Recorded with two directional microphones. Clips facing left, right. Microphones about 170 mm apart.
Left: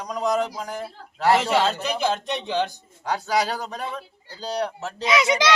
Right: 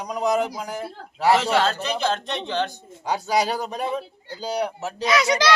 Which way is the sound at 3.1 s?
15° right (ahead or behind).